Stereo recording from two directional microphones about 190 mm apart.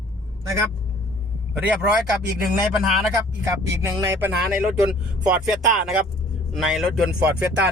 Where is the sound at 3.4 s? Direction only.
15° right (ahead or behind).